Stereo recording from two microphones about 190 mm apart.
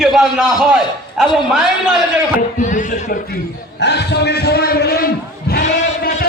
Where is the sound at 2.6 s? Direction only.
40° left (ahead or behind).